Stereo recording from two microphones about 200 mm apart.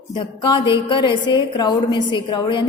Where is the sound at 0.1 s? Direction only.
25° left (ahead or behind).